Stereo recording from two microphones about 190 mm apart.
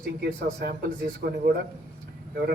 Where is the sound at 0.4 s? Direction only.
55° right (ahead or behind).